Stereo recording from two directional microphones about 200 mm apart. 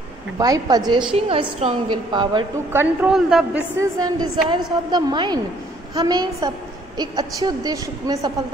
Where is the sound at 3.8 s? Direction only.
20° right (ahead or behind).